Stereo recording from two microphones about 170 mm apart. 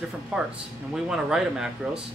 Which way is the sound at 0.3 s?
5° right (ahead or behind).